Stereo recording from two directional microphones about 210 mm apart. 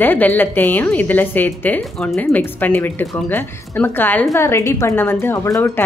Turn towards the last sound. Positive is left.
turn(degrees=15)  # may be behind; listen again after turning